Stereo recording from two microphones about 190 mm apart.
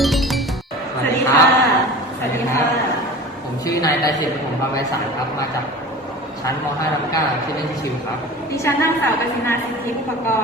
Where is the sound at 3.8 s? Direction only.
20° left (ahead or behind).